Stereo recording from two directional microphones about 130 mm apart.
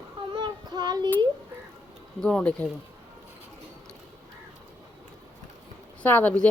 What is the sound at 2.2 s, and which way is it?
Speech, 10° left (ahead or behind).